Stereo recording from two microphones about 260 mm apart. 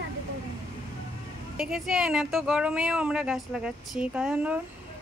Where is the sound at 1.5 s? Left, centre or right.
Centre.